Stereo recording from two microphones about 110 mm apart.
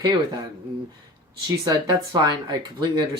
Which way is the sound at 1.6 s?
35° right (ahead or behind).